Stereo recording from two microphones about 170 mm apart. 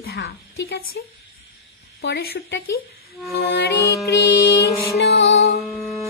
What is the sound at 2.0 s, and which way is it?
Speech, 85° left.